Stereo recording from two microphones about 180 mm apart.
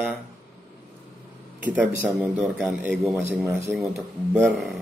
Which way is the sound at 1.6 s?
10° right (ahead or behind).